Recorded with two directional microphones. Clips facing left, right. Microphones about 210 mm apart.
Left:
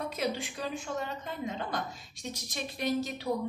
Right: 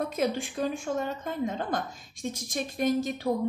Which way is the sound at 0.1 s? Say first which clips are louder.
Right 5 dB; 50° right (ahead or behind).